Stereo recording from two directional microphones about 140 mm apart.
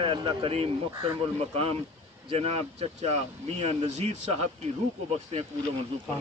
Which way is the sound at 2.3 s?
45° right (ahead or behind).